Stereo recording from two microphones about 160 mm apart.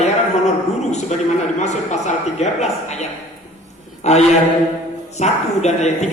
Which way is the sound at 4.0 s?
45° left (ahead or behind).